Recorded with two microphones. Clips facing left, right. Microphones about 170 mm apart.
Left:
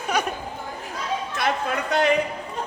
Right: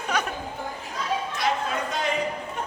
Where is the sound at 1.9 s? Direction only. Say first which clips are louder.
Left 8 dB; 70° left (ahead or behind).